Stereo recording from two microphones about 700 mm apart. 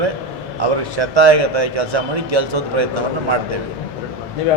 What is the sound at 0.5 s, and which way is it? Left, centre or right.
Speech, right.